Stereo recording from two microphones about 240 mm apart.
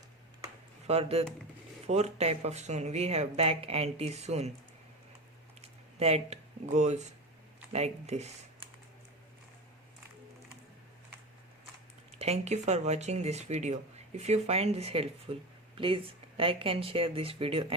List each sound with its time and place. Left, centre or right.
0.9 s speech: right
5.6 s speech: right
12.2 s speech: right